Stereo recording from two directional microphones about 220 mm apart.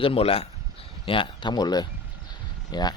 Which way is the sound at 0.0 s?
25° left (ahead or behind).